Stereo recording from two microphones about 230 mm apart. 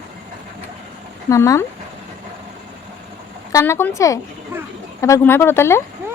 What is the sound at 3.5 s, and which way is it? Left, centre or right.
Speech, centre.